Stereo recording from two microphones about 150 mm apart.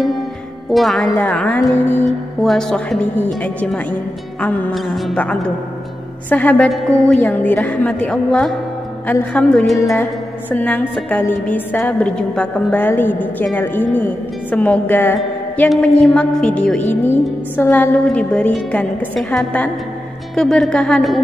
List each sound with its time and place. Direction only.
0.7 s a woman's voice: centre (ahead or behind)
4.7 s a woman's voice: centre (ahead or behind)
9.8 s music: 20° left (ahead or behind)
10.0 s a woman's voice: 10° left (ahead or behind)